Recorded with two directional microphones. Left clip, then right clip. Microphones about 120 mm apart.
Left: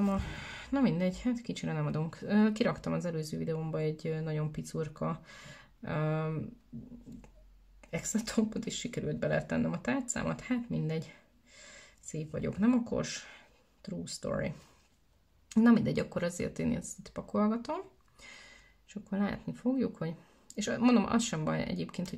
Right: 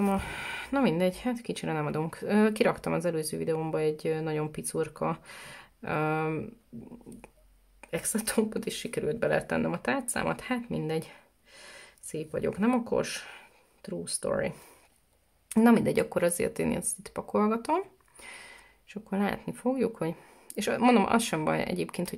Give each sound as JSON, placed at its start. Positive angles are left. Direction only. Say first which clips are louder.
{"t": 0.0, "sound": "speech", "louder": "right 5 dB", "side_deg": -25}
{"t": 7.9, "sound": "speech", "louder": "right 4 dB", "side_deg": -20}